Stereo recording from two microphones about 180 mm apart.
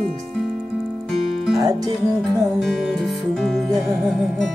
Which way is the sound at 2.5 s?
Centre (ahead or behind).